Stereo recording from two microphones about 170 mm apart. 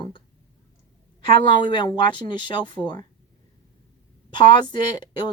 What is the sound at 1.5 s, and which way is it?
Speech, 30° left (ahead or behind).